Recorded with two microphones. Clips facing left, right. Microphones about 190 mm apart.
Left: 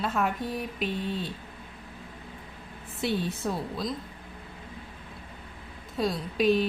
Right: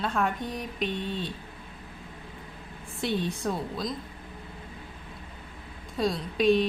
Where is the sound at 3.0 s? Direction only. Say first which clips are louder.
Even; centre (ahead or behind).